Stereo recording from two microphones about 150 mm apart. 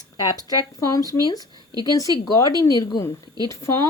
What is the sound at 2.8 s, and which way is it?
Speech, 25° left (ahead or behind).